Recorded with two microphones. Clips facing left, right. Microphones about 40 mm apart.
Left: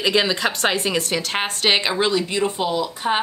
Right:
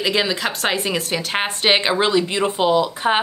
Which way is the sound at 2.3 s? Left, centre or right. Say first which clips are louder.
Right 4 dB; right.